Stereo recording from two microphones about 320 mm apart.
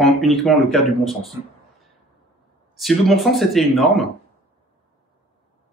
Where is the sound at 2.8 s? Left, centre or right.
Centre.